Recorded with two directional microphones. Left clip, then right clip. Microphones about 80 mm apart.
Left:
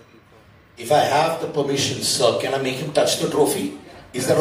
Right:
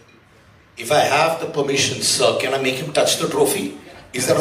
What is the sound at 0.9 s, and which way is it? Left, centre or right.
A man's voice, right.